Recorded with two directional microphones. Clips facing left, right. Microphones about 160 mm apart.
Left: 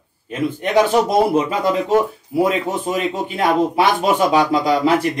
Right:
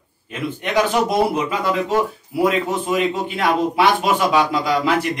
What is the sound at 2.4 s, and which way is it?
Speech, 40° left (ahead or behind).